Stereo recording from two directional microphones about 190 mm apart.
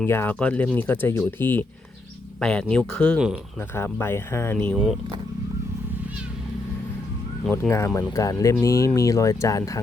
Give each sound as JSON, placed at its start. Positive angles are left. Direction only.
{"t": 0.0, "sound": "speech", "side_deg": 10}
{"t": 4.7, "sound": "speech", "side_deg": 0}
{"t": 7.5, "sound": "speech", "side_deg": 15}